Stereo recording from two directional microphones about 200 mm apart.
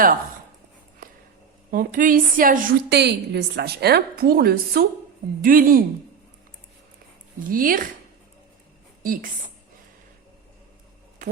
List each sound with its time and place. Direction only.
1.7 s a woman's voice: 45° right (ahead or behind)
7.4 s a woman's voice: 45° right (ahead or behind)